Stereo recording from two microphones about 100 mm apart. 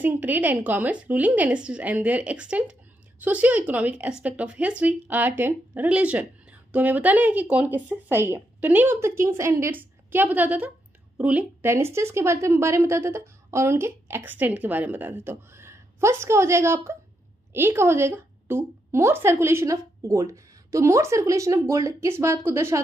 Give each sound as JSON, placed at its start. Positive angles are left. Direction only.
{"t": 0.0, "sound": "a woman's voice", "side_deg": -15}
{"t": 11.6, "sound": "a woman's voice", "side_deg": -25}